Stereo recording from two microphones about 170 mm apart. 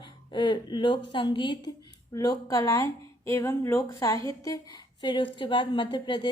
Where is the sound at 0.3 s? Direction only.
25° left (ahead or behind).